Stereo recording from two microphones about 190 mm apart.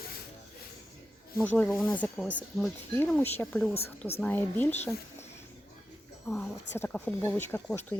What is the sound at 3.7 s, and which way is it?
Speech, 30° left (ahead or behind).